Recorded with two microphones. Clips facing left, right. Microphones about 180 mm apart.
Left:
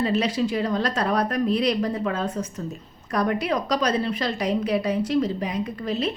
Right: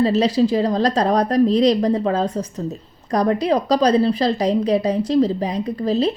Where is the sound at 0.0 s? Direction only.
35° right (ahead or behind).